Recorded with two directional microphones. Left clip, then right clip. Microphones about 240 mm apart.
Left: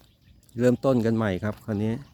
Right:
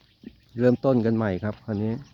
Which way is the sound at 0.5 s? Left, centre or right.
Centre.